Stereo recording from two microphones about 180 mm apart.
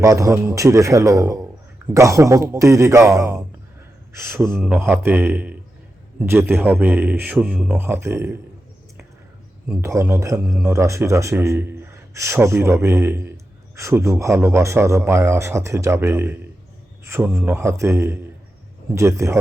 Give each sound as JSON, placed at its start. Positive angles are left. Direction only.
{"t": 0.0, "sound": "a man's voice", "side_deg": -15}
{"t": 9.6, "sound": "a man's voice", "side_deg": -15}